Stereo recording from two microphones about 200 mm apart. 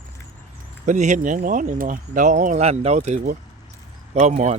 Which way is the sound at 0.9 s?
40° right (ahead or behind).